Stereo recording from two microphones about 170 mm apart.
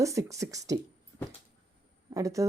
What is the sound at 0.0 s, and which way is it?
Speech, 20° right (ahead or behind).